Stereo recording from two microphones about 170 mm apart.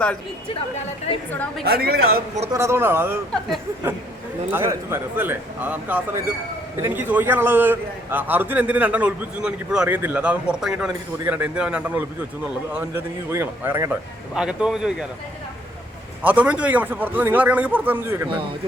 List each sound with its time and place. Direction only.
1.3 s a woman's voice: 10° left (ahead or behind)
1.6 s a woman's voice: 65° right (ahead or behind)
2.5 s a man's voice: 15° right (ahead or behind)
4.5 s a man's voice: 15° right (ahead or behind)
14.3 s a man's voice: 5° right (ahead or behind)
16.2 s a man's voice: 10° right (ahead or behind)